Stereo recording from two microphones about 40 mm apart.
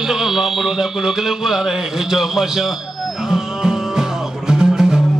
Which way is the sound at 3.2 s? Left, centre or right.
Centre.